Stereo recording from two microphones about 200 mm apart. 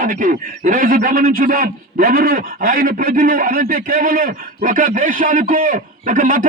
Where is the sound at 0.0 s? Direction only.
40° right (ahead or behind).